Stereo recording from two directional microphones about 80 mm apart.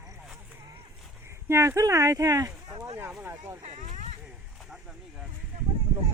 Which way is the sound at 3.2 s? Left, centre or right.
Right.